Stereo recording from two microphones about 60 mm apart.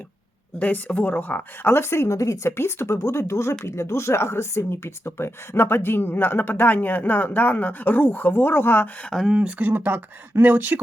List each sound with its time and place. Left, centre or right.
0.6 s speech: left
2.6 s speech: left
9.2 s speech: centre; by 10.8 s right